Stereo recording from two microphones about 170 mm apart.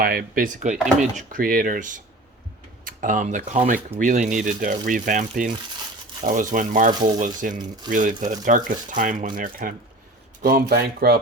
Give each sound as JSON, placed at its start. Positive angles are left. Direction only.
{"t": 0.0, "sound": "speech", "side_deg": -60}
{"t": 1.3, "sound": "speech", "side_deg": -55}